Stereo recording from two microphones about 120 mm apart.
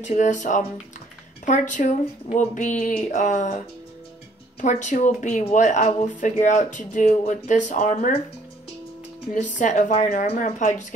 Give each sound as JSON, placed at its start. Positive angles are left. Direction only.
{"t": 0.0, "sound": "speech", "side_deg": 80}
{"t": 9.3, "sound": "speech", "side_deg": 90}